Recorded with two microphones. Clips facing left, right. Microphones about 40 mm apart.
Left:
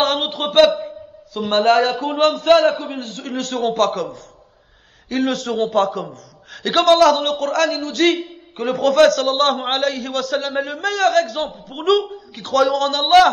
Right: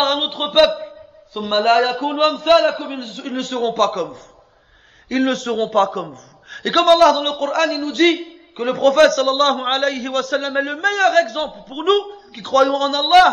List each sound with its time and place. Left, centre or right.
0.0 s a sound: right
1.5 s a man's voice: right
2.6 s a man's voice: right
2.9 s a man's voice: right
3.5 s a man's voice: right